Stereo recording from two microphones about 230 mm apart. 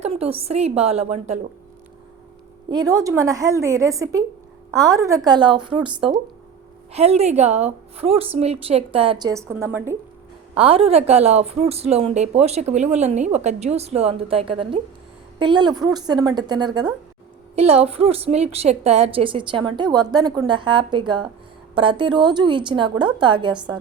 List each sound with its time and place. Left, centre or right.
0.0 s speech: right
2.6 s a woman's voice: centre
6.9 s speech: right; by 9.9 s centre
10.6 s a woman's voice: right